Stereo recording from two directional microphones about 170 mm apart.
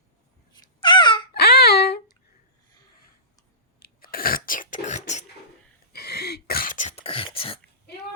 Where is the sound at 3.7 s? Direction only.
60° left (ahead or behind); by 5.2 s 45° left (ahead or behind).